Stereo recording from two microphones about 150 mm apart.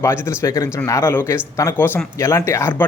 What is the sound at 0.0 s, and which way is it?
Speech, 15° left (ahead or behind).